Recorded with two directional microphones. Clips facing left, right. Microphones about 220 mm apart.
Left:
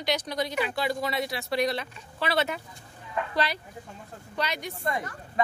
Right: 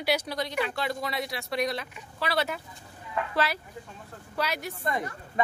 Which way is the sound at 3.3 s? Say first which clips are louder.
Right 1 dB; 5° right (ahead or behind).